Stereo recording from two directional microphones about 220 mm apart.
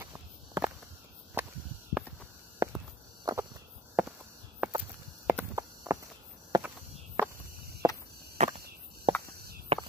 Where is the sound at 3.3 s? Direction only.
15° right (ahead or behind).